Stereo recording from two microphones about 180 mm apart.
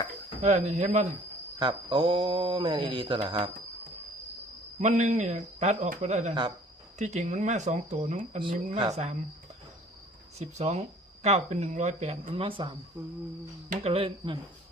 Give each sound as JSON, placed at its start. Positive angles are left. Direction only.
{"t": 0.4, "sound": "speech", "side_deg": -40}
{"t": 1.5, "sound": "speech", "side_deg": -25}
{"t": 4.8, "sound": "speech", "side_deg": -40}
{"t": 10.3, "sound": "speech", "side_deg": -35}
{"t": 13.0, "sound": "humming", "side_deg": -10}
{"t": 13.7, "sound": "speech", "side_deg": -35}